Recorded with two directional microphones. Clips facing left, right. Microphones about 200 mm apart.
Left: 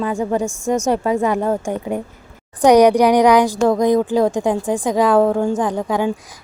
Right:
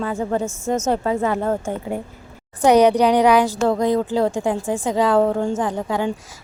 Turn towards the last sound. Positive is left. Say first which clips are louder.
# left 3 dB
turn(degrees=15)  # may be behind; listen again after turning